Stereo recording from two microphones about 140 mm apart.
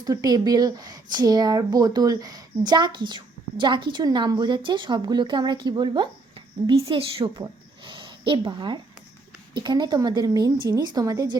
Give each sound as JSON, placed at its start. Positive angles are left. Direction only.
{"t": 0.0, "sound": "a woman's voice", "side_deg": -25}